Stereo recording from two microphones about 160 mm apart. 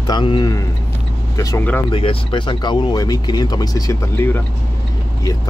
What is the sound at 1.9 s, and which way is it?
Speech, 35° left (ahead or behind).